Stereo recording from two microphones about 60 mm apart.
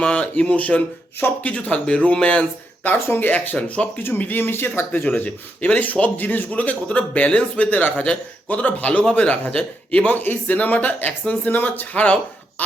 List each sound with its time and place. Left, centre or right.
0.0 s a man's voice: centre
3.1 s speech: left
5.0 s a man's voice: left
10.0 s a man's voice: left
12.0 s a sound: centre